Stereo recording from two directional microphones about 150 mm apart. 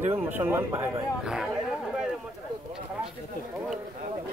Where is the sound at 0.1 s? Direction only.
15° right (ahead or behind).